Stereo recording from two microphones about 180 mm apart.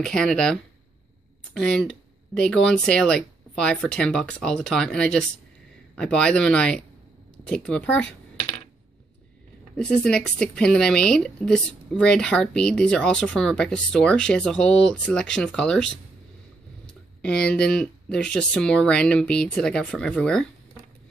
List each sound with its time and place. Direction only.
0.0 s speech: 5° left (ahead or behind)
9.8 s speech: 5° left (ahead or behind)
17.2 s speech: 5° left (ahead or behind)